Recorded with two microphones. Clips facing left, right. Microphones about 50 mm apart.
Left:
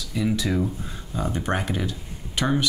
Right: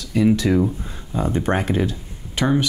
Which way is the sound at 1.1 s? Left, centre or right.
Right.